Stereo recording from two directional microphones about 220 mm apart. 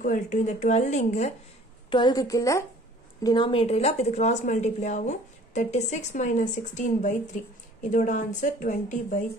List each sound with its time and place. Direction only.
0.0 s a woman's voice: 35° left (ahead or behind)
1.9 s a woman's voice: 20° left (ahead or behind)